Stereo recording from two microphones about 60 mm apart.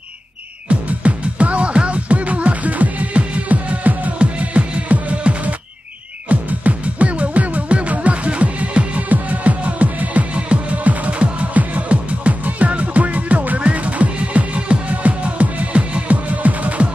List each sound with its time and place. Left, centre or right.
0.7 s music: right